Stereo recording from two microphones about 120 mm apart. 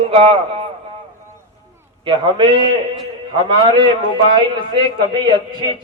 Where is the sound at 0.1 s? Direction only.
55° right (ahead or behind).